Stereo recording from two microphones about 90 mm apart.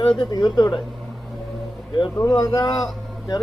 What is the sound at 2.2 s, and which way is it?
Speech, 40° left (ahead or behind).